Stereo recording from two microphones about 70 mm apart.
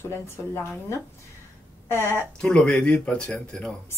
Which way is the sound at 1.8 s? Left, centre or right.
Left.